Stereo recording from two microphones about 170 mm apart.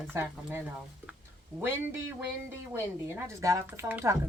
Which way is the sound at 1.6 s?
10° right (ahead or behind).